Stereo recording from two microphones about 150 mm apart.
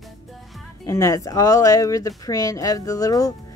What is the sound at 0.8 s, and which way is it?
A woman's voice, 20° left (ahead or behind).